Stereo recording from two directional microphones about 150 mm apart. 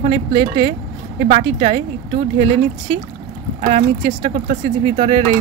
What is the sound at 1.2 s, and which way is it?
Speech, 45° right (ahead or behind).